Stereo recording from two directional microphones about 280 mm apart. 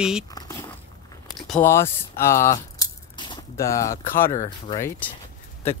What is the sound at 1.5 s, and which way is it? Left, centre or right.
Speech, centre.